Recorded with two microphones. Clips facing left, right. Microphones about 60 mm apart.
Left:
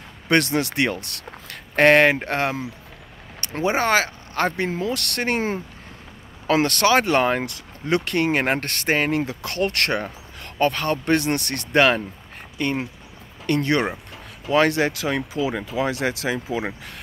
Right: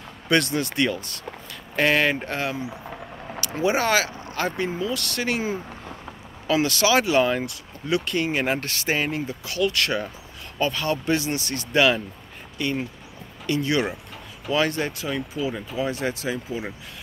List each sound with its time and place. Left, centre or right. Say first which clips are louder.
0.3 s speech: left 2 dB; left
3.3 s speech: left 1 dB; left
9.2 s speech: left 3 dB; left
9.6 s speech: left 1 dB; left
13.5 s speech: left 2 dB; left